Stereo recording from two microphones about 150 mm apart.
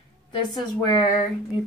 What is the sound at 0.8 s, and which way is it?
Speech, 30° left (ahead or behind).